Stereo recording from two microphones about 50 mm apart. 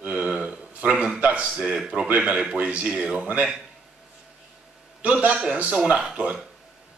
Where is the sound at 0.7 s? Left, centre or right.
Right.